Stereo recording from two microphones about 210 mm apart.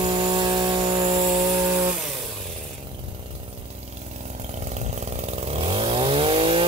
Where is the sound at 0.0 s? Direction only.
25° right (ahead or behind).